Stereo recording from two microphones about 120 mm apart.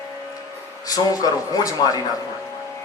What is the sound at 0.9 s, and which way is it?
Speech, 30° left (ahead or behind).